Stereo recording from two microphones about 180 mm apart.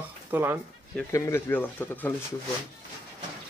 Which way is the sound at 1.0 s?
15° left (ahead or behind).